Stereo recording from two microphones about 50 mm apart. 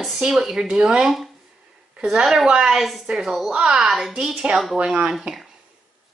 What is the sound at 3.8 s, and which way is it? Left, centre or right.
Speech, centre.